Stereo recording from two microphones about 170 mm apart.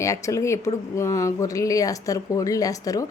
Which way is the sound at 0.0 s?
20° left (ahead or behind).